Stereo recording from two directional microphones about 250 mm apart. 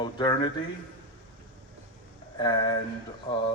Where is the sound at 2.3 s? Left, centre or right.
Centre.